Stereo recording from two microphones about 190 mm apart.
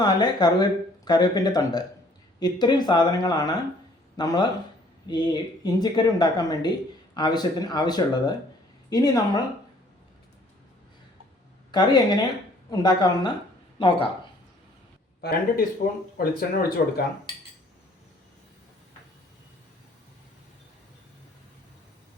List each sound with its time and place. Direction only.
0.0 s speech: 20° left (ahead or behind)
11.7 s speech: 20° left (ahead or behind)
15.2 s speech: 50° left (ahead or behind)